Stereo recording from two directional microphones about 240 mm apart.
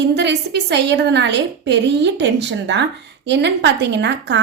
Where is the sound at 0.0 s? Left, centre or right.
Right.